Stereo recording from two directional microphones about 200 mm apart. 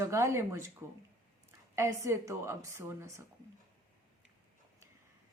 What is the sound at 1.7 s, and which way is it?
Speech, 15° right (ahead or behind).